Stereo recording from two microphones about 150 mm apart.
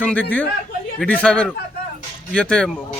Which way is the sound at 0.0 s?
10° left (ahead or behind).